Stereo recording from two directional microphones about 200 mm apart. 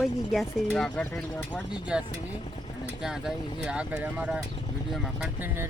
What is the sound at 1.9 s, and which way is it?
Speech, 5° right (ahead or behind).